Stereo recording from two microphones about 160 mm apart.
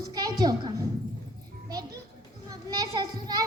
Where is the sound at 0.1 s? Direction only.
25° right (ahead or behind).